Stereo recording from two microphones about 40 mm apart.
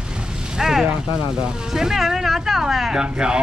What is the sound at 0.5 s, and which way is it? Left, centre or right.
Speech, centre.